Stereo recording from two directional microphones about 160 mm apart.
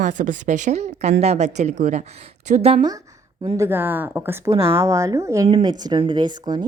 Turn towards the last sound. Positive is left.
turn(degrees=-25)  # may be behind; listen again after turning